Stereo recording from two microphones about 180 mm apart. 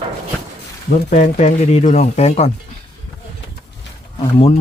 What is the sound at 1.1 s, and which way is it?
Speech, 40° left (ahead or behind).